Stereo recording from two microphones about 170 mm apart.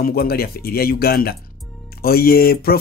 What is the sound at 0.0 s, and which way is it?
Speech, 60° left (ahead or behind).